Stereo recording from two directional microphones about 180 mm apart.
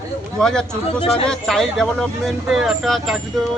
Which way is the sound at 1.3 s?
5° left (ahead or behind).